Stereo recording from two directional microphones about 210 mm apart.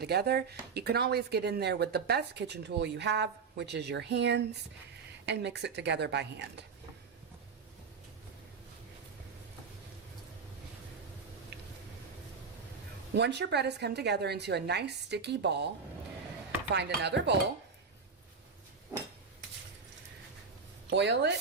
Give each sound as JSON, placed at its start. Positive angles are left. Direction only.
{"t": 0.0, "sound": "speech", "side_deg": -50}
{"t": 13.1, "sound": "speech", "side_deg": -55}
{"t": 16.7, "sound": "speech", "side_deg": -55}
{"t": 20.9, "sound": "speech", "side_deg": -55}